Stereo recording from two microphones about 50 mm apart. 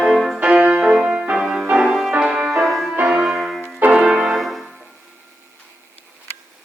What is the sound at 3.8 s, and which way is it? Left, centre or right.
Piano, right.